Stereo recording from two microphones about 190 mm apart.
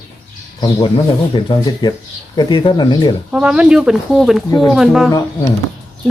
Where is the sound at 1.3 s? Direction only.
25° left (ahead or behind).